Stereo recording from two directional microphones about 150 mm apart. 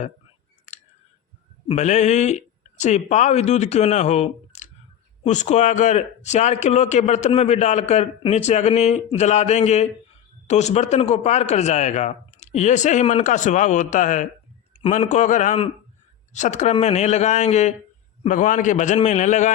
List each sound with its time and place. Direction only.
0.7 s scissors: 50° left (ahead or behind)
1.6 s a man's voice: 50° left (ahead or behind)
14.8 s a man's voice: 45° left (ahead or behind)